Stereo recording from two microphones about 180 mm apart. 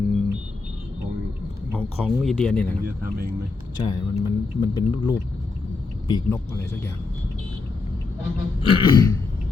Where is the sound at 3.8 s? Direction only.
25° left (ahead or behind).